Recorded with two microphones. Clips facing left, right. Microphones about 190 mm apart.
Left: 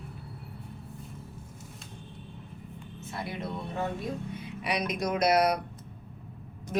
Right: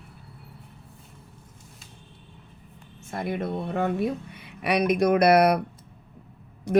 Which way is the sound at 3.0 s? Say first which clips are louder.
Right 7 dB; 50° right (ahead or behind).